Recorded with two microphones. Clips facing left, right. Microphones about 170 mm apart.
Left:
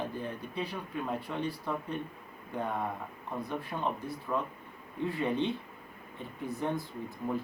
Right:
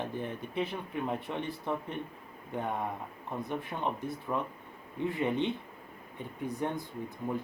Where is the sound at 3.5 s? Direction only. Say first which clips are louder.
Even; 20° right (ahead or behind).